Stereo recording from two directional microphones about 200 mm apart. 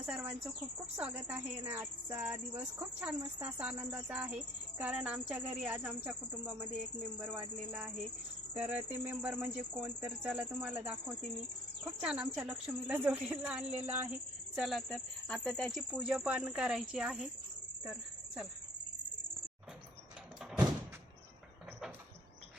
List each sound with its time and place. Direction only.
0.0 s a woman's voice: 5° right (ahead or behind)
11.9 s a woman's voice: 5° right (ahead or behind)